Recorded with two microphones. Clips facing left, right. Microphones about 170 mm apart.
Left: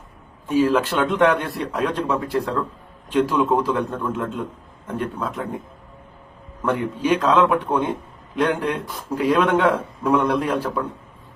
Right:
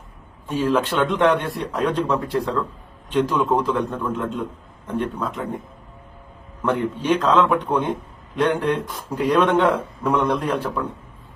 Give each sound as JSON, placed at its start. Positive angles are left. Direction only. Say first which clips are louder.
{"t": 0.4, "sound": "speech", "louder": "left 2 dB", "side_deg": 10}
{"t": 7.0, "sound": "a man's voice", "louder": "left 1 dB", "side_deg": 10}